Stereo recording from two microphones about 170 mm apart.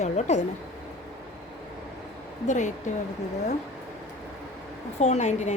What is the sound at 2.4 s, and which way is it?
Speech, 45° left (ahead or behind).